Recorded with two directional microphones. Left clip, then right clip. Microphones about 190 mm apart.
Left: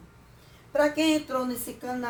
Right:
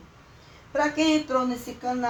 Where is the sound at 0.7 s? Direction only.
45° left (ahead or behind).